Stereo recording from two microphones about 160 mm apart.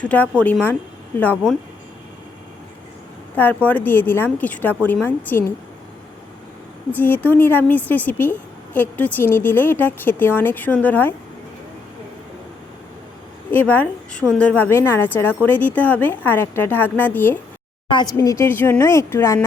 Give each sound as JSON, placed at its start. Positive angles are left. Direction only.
{"t": 0.0, "sound": "a woman's voice", "side_deg": 10}
{"t": 3.3, "sound": "a woman's voice", "side_deg": 10}
{"t": 6.9, "sound": "a woman's voice", "side_deg": 10}
{"t": 13.5, "sound": "a woman's voice", "side_deg": 10}
{"t": 17.9, "sound": "a woman's voice", "side_deg": 25}